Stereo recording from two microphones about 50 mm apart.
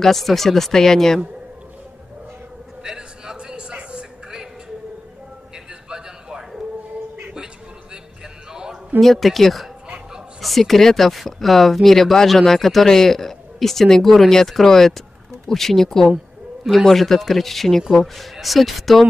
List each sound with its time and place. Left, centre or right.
0.0 s speech: centre
2.8 s music: centre
5.9 s a sound: centre
9.0 s speech: centre